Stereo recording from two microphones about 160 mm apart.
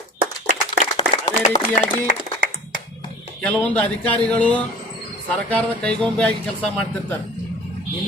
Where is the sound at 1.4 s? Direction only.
50° left (ahead or behind).